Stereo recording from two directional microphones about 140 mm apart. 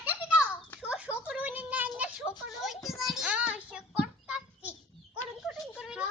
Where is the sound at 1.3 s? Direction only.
10° right (ahead or behind).